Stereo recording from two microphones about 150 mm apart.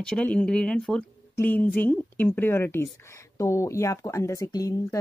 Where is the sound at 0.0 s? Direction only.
5° left (ahead or behind).